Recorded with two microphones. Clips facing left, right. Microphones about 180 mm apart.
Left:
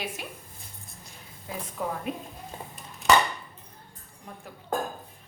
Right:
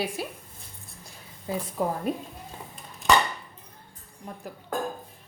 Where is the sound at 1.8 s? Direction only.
40° right (ahead or behind).